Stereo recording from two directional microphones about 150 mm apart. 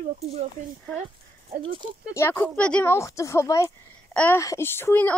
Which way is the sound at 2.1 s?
15° left (ahead or behind).